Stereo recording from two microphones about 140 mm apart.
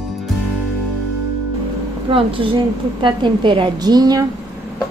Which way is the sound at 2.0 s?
40° right (ahead or behind).